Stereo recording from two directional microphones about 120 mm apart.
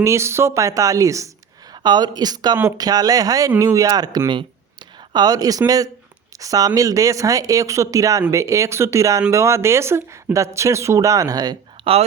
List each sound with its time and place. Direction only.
0.0 s speech: 25° right (ahead or behind)
1.7 s speech: 35° right (ahead or behind)
11.8 s a sound: 45° right (ahead or behind)